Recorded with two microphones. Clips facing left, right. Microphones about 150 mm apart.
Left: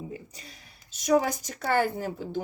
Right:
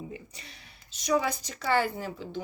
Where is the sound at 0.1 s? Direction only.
40° left (ahead or behind).